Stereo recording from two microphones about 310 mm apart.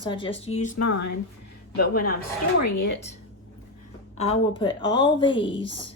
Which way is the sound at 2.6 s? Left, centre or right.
Left.